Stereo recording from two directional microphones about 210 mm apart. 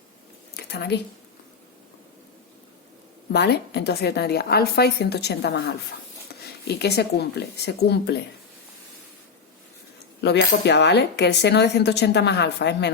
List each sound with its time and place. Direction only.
0.5 s a sound: 50° left (ahead or behind)
3.3 s speech: 50° left (ahead or behind)
10.2 s speech: 55° left (ahead or behind)